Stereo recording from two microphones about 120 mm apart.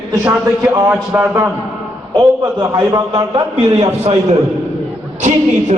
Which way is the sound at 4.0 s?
65° right (ahead or behind).